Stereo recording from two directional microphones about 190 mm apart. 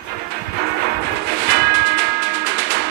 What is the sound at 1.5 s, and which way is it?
Music, 65° right (ahead or behind).